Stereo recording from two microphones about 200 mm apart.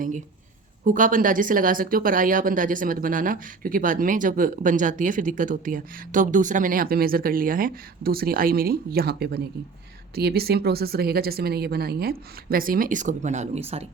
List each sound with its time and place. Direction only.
0.9 s speech: 40° right (ahead or behind)